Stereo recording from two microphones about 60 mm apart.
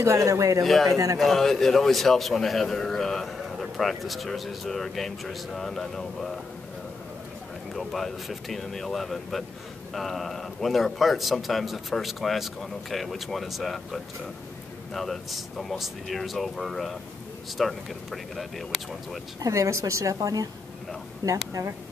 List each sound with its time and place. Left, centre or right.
0.0 s a woman's voice: right
0.7 s a man's voice: centre
0.9 s a man's voice: right
1.2 s a man's voice: centre
7.7 s a man's voice: centre
19.4 s a woman's voice: right
21.2 s a woman's voice: right